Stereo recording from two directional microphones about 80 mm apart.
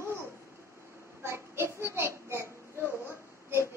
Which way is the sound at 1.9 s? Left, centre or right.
Right.